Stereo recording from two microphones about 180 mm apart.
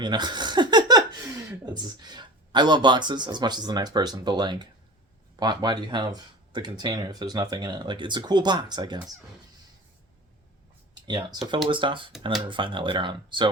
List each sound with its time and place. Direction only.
0.0 s speech: 25° right (ahead or behind)
11.0 s speech: 25° right (ahead or behind)